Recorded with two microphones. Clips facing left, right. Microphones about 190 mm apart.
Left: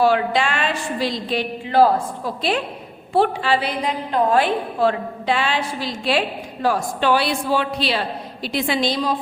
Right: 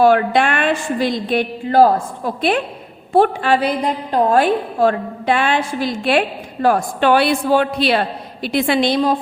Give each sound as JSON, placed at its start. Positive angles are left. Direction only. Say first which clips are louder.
{"t": 0.0, "sound": "a woman's voice", "louder": "right 4 dB", "side_deg": -55}